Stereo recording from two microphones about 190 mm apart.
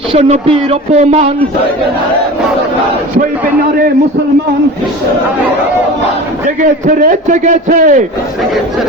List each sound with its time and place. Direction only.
0.1 s a man's voice: 35° right (ahead or behind)
6.6 s a man's voice: 45° right (ahead or behind)